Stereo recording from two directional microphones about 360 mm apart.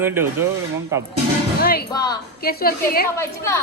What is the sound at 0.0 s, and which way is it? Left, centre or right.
Speech, centre.